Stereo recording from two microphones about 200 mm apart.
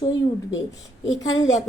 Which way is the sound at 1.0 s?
70° left (ahead or behind).